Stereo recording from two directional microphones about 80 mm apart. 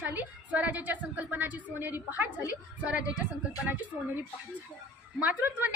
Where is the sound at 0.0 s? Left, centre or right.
Right.